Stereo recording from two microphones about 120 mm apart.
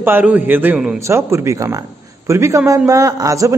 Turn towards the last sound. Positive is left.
turn(degrees=-30)  # may be behind; listen again after turning